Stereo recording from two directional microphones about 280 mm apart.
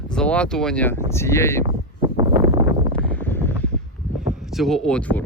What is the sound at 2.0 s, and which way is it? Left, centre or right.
Wind noise, centre.